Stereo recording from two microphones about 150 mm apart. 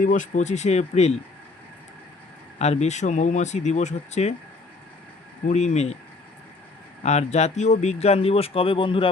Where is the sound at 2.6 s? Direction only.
45° left (ahead or behind).